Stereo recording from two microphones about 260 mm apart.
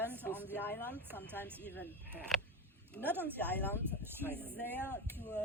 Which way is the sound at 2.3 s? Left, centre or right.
Centre.